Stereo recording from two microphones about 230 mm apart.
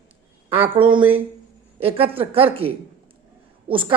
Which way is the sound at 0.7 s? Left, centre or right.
Right.